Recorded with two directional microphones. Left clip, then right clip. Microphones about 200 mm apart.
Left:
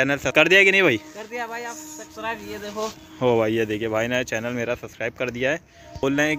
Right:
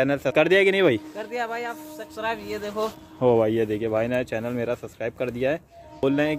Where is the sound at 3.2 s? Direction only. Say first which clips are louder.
Even; 5° right (ahead or behind).